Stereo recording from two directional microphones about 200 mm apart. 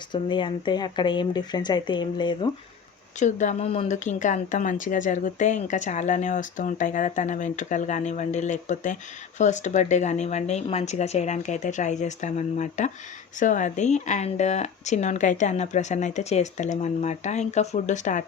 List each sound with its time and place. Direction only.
0.1 s speech: 25° left (ahead or behind)
3.2 s a woman's voice: 35° left (ahead or behind)